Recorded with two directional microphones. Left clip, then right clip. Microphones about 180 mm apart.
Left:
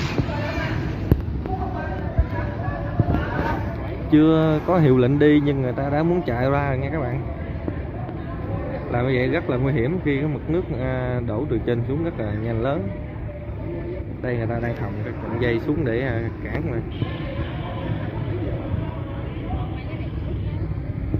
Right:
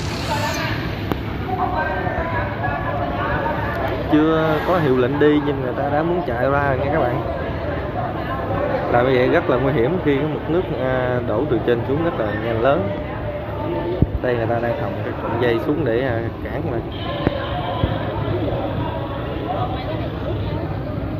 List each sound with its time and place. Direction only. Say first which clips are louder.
4.1 s speech: even; 20° left (ahead or behind)
8.9 s speech: right 6 dB; centre (ahead or behind)
15.4 s speech: right 3 dB; centre (ahead or behind)